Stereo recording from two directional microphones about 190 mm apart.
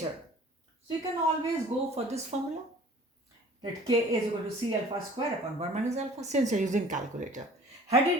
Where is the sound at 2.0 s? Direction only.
35° right (ahead or behind).